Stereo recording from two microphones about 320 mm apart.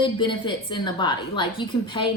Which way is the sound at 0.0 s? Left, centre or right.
Centre.